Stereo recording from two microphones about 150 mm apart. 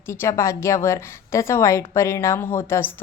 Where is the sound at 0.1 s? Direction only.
20° left (ahead or behind).